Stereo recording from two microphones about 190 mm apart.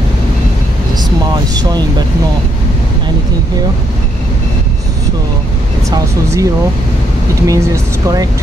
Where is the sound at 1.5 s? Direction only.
20° right (ahead or behind).